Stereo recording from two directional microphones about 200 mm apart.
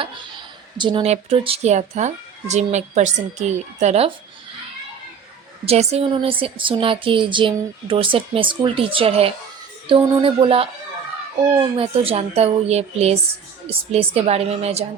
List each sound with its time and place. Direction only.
0.8 s speech: 25° right (ahead or behind)
5.6 s a woman's voice: 30° right (ahead or behind)